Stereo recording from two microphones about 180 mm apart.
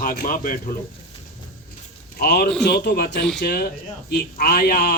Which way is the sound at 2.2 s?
60° left (ahead or behind).